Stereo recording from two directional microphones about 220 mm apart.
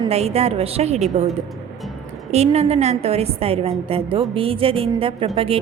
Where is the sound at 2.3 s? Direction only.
30° right (ahead or behind).